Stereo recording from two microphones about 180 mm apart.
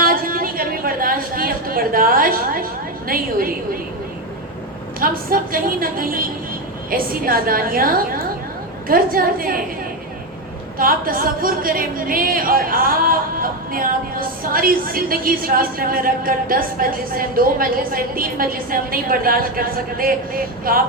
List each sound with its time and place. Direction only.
0.0 s a sound: 55° right (ahead or behind)
3.1 s speech: 55° right (ahead or behind)
4.9 s speech: 50° right (ahead or behind)
10.8 s speech: 50° right (ahead or behind)